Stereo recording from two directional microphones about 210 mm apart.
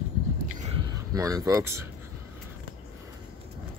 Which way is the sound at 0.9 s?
15° right (ahead or behind).